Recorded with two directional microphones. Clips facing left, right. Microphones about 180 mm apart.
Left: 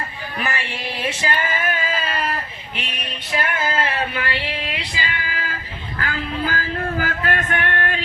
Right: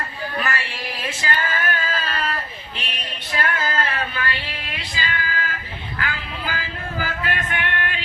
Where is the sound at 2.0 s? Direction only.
10° left (ahead or behind).